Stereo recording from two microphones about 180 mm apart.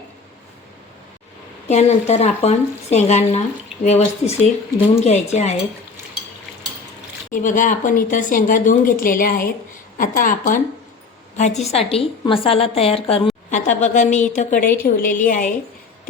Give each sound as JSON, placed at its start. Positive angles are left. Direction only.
{"t": 1.6, "sound": "speech", "side_deg": 40}
{"t": 7.3, "sound": "speech", "side_deg": 45}
{"t": 11.7, "sound": "speech", "side_deg": 35}